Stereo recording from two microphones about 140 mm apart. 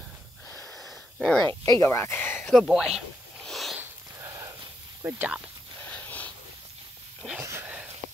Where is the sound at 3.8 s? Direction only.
25° right (ahead or behind).